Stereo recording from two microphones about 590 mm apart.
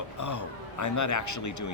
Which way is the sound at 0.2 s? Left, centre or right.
Left.